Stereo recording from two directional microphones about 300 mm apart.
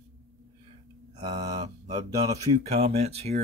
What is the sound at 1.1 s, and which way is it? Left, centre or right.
Speech, centre.